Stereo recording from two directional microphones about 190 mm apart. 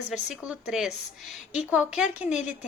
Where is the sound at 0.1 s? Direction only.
5° right (ahead or behind).